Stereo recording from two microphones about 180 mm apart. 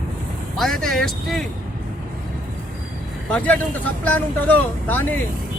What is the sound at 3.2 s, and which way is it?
Speech, 5° left (ahead or behind).